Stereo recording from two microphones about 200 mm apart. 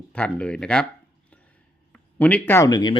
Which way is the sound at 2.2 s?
5° left (ahead or behind).